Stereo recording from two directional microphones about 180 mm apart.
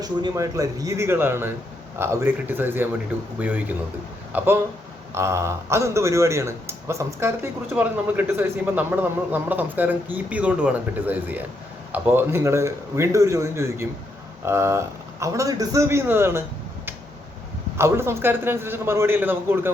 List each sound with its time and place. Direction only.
0.0 s speech: 20° right (ahead or behind)
17.7 s speech: 15° right (ahead or behind)